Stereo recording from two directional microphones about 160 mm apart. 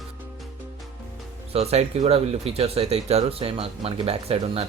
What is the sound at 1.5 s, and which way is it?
Speech, 40° right (ahead or behind).